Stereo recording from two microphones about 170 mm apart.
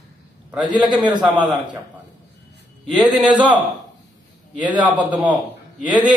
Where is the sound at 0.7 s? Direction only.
10° right (ahead or behind).